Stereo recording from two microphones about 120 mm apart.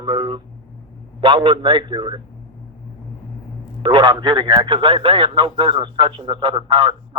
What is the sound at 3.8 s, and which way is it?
Speech, 40° right (ahead or behind).